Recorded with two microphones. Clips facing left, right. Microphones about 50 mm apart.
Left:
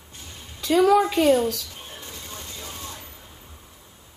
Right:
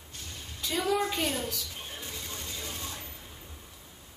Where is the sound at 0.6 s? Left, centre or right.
Left.